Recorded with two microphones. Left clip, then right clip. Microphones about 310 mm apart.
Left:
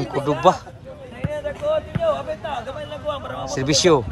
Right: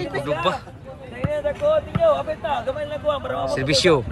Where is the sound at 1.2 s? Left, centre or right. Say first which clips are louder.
Right 4 dB; centre.